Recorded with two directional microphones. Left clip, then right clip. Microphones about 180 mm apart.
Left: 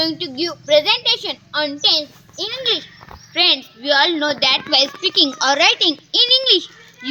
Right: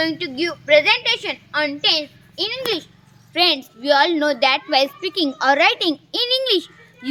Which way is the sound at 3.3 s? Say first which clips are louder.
Left 2 dB; 45° right (ahead or behind).